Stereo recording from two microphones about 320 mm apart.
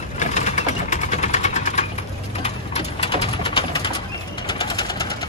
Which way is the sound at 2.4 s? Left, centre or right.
Centre.